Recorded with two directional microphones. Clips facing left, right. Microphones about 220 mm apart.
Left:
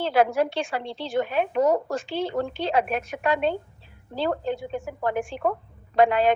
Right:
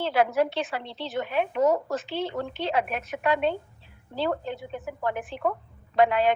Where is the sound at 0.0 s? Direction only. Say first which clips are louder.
Left 2 dB; 40° left (ahead or behind).